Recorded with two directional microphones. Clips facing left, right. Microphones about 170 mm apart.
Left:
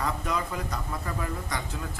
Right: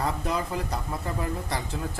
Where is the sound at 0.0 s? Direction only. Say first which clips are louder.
Right 2 dB; 30° right (ahead or behind).